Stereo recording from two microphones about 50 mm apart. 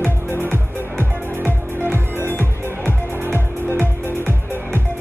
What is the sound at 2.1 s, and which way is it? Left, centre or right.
Music, left.